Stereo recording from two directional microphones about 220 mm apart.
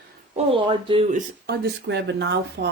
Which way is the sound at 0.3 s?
25° right (ahead or behind).